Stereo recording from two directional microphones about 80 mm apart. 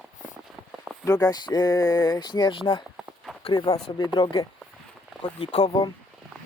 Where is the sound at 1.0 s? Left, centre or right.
Left.